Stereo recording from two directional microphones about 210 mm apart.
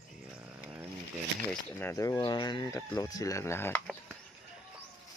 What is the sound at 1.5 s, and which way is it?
Speech, 10° left (ahead or behind).